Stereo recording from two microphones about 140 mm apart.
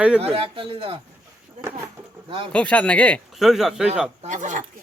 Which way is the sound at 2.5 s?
10° left (ahead or behind).